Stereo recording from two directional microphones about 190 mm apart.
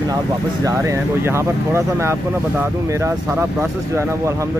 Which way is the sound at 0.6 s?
15° right (ahead or behind).